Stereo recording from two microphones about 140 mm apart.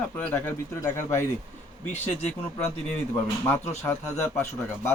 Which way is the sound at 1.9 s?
55° left (ahead or behind).